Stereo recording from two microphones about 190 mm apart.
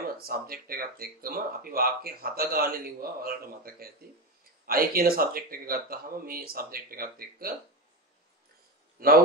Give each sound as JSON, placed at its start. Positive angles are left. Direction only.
{"t": 0.0, "sound": "speech", "side_deg": -50}